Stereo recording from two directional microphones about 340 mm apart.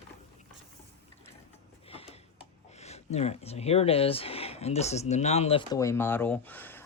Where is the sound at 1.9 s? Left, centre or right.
Centre.